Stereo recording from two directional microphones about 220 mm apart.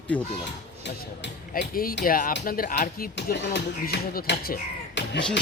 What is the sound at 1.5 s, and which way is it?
Speech, 40° left (ahead or behind).